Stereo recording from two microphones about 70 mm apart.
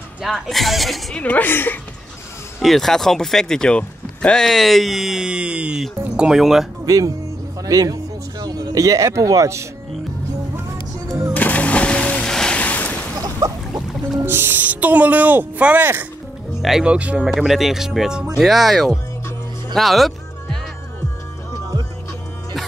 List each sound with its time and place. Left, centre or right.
0.2 s speech: centre
1.1 s a woman's voice: left
2.6 s speech: centre
6.9 s speech: right
11.3 s music: left
12.5 s a sound: left
13.4 s a sound: right
14.2 s speech: right
16.8 s speech: centre